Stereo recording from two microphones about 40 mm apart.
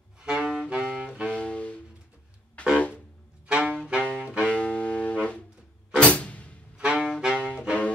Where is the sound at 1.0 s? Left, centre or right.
Centre.